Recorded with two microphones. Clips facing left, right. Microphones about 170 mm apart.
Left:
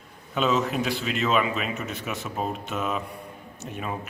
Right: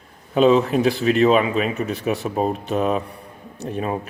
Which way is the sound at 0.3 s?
35° right (ahead or behind).